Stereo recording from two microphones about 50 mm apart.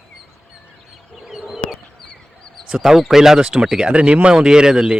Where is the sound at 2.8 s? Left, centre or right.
Centre.